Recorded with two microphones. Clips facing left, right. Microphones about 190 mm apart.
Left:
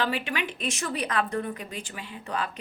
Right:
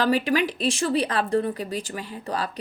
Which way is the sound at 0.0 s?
40° right (ahead or behind).